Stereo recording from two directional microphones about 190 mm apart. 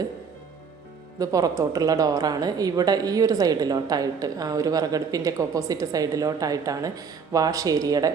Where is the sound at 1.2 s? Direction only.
20° right (ahead or behind).